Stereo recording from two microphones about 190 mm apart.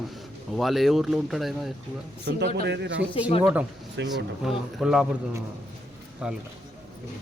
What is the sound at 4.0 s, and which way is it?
Speech, 65° right (ahead or behind).